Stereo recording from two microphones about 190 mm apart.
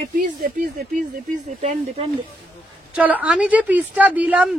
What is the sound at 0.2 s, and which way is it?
Speech, 50° right (ahead or behind).